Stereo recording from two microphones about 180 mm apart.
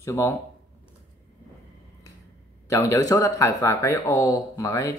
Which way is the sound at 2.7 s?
20° left (ahead or behind).